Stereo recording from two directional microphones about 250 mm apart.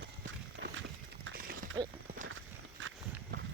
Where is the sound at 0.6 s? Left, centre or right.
Right.